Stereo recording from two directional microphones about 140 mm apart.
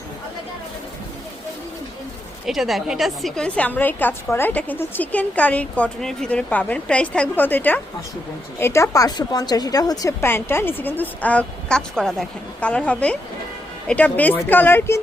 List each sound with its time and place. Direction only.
2.5 s a woman's voice: centre (ahead or behind); by 14.9 s 15° left (ahead or behind)